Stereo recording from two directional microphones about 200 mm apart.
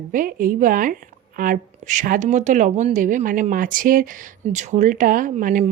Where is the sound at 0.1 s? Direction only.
45° right (ahead or behind).